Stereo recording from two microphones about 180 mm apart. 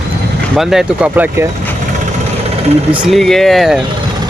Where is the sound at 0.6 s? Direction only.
Centre (ahead or behind).